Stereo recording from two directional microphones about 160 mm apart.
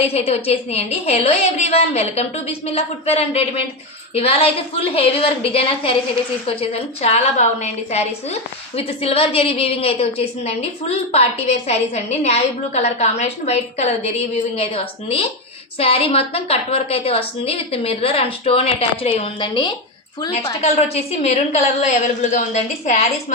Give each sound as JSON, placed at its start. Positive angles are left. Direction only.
{"t": 0.0, "sound": "a woman's voice", "side_deg": 40}
{"t": 20.3, "sound": "a woman's voice", "side_deg": 40}